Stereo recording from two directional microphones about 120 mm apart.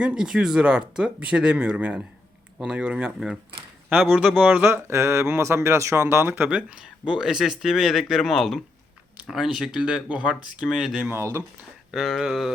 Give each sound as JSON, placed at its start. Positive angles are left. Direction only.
{"t": 0.0, "sound": "speech", "side_deg": -10}
{"t": 11.1, "sound": "speech", "side_deg": -20}
{"t": 11.9, "sound": "speech", "side_deg": 0}